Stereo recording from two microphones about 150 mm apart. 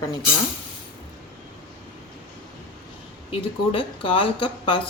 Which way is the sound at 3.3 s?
35° left (ahead or behind).